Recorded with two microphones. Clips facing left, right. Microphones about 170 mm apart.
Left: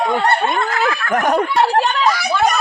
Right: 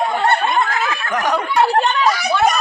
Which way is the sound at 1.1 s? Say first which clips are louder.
Left 3 dB; 55° left (ahead or behind).